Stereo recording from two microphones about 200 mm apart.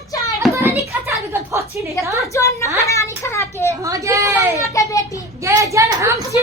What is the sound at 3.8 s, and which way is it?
Speech, 15° right (ahead or behind).